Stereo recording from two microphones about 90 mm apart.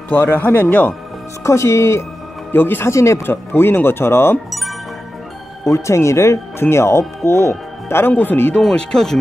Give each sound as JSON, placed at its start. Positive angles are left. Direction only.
{"t": 0.1, "sound": "speech", "side_deg": 20}
{"t": 1.4, "sound": "speech", "side_deg": 30}
{"t": 4.5, "sound": "music", "side_deg": 0}
{"t": 5.7, "sound": "speech", "side_deg": 30}
{"t": 8.5, "sound": "speech", "side_deg": 5}